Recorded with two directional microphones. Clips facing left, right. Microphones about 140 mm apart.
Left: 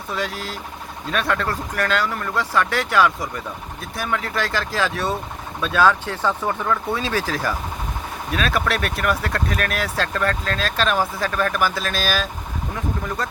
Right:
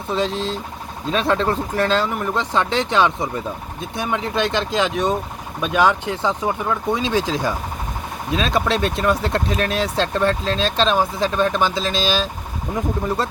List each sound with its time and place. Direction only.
0.1 s speech: 25° right (ahead or behind)